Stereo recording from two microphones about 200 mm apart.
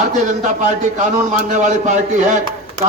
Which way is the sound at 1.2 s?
35° right (ahead or behind).